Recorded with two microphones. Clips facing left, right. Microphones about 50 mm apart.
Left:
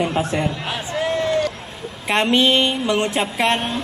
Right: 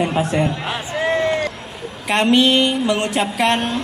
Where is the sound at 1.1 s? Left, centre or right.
Right.